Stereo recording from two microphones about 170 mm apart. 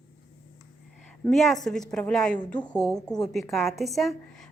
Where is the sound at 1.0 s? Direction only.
5° left (ahead or behind).